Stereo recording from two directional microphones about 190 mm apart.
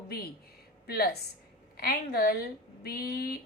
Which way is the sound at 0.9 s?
55° left (ahead or behind).